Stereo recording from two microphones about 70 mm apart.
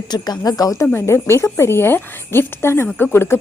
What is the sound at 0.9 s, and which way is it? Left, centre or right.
A woman's voice, left.